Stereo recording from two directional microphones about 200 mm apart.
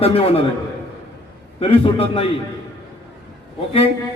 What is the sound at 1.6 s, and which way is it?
Speech, 30° left (ahead or behind).